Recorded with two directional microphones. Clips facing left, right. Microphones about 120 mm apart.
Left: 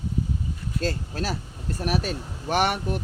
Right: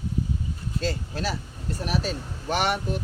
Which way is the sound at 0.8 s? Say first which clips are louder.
Left 1 dB; 45° left (ahead or behind).